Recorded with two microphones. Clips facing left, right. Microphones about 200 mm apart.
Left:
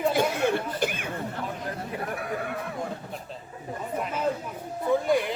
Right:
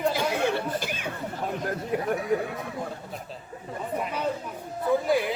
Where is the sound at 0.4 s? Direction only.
50° left (ahead or behind).